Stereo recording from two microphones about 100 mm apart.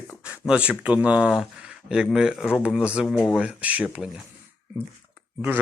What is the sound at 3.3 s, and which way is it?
Speech, 10° right (ahead or behind).